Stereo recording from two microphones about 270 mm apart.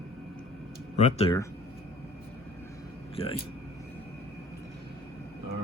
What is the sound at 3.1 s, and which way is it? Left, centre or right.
Speech, left.